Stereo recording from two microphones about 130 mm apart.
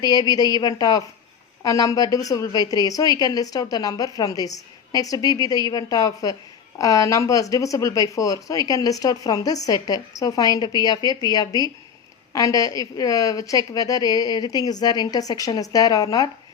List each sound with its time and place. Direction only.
0.0 s speech: 30° left (ahead or behind)